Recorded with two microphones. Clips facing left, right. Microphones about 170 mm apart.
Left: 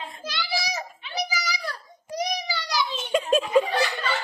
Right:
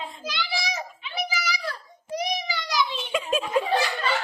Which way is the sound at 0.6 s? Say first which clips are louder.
Even; 35° left (ahead or behind).